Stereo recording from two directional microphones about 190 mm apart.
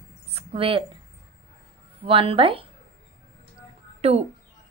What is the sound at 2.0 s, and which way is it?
Speech, 30° right (ahead or behind).